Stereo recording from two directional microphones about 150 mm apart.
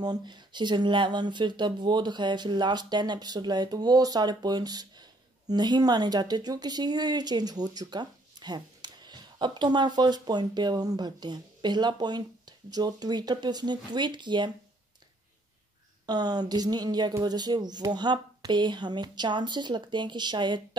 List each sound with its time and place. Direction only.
0.0 s speech: 30° right (ahead or behind)
16.1 s speech: 25° right (ahead or behind)